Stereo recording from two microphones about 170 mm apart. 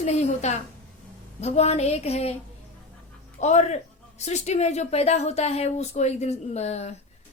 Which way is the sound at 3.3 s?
40° left (ahead or behind).